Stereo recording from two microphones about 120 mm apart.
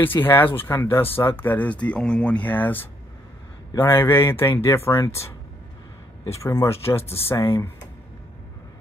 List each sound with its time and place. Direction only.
0.0 s speech: 15° left (ahead or behind)